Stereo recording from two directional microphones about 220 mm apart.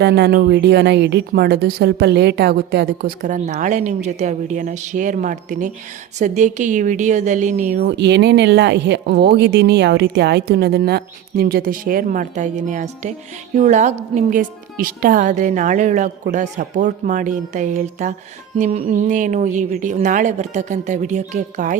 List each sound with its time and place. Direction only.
0.0 s a woman's voice: 50° right (ahead or behind)
7.9 s a woman's voice: 50° right (ahead or behind); by 21.8 s 35° right (ahead or behind)